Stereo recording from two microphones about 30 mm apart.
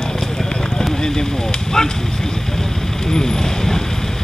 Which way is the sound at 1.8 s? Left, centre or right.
Centre.